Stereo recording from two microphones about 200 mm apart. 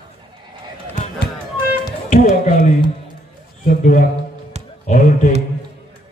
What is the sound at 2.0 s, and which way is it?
Speech, 40° left (ahead or behind).